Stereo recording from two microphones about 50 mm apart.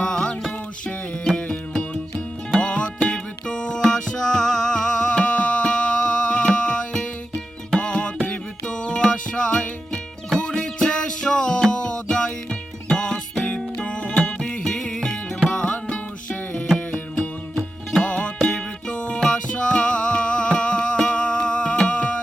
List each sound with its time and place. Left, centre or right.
0.0 s music: centre
2.6 s music: left
18.0 s music: left